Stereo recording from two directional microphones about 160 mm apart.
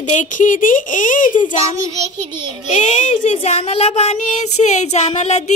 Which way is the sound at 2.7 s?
50° left (ahead or behind).